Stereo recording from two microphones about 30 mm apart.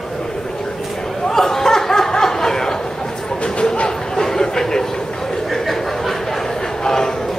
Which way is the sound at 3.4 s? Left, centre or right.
Left.